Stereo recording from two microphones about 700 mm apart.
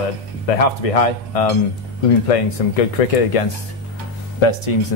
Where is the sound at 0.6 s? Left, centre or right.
Left.